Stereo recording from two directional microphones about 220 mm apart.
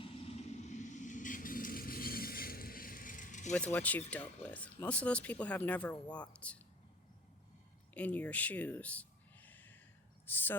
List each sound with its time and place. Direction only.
0.0 s vehicle: 30° left (ahead or behind)
3.5 s speech: 5° left (ahead or behind)
7.9 s a sound: 5° left (ahead or behind)
10.2 s speech: 10° left (ahead or behind)